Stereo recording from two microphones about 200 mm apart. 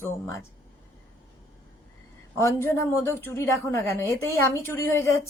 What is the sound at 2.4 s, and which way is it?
Speech, 15° left (ahead or behind).